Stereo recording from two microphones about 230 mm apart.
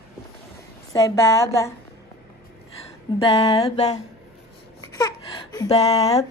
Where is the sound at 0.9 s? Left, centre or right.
Centre.